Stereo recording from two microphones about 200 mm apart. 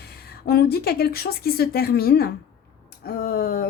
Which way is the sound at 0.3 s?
50° left (ahead or behind).